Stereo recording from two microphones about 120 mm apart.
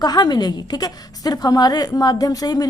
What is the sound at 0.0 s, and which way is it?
A woman's voice, 35° left (ahead or behind).